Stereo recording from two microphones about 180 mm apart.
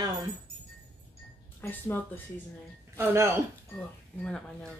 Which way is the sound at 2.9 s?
15° right (ahead or behind).